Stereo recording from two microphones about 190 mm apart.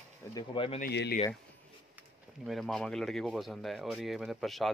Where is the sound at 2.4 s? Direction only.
Centre (ahead or behind).